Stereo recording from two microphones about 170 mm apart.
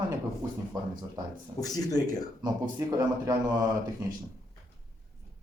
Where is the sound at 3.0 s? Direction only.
20° right (ahead or behind).